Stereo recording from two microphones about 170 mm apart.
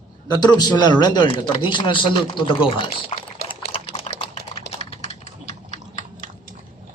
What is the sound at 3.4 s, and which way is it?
Typing, 30° left (ahead or behind).